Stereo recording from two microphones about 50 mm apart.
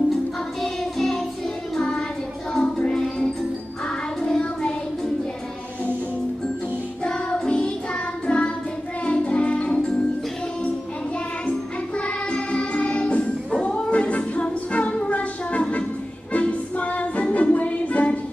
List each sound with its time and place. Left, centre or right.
0.6 s music: centre
1.8 s child singing: centre
2.5 s music: centre
4.4 s child singing: centre
7.4 s music: left
12.0 s music: left